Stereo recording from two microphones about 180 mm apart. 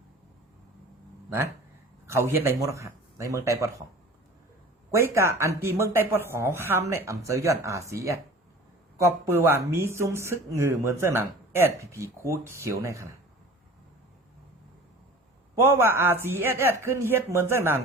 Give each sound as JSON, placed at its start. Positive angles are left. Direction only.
{"t": 2.0, "sound": "speech", "side_deg": -15}
{"t": 4.9, "sound": "speech", "side_deg": -15}
{"t": 15.6, "sound": "speech", "side_deg": -15}